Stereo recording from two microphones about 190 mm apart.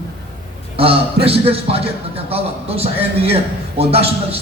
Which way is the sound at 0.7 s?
30° right (ahead or behind).